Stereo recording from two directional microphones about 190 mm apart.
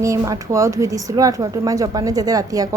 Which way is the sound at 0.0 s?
15° right (ahead or behind).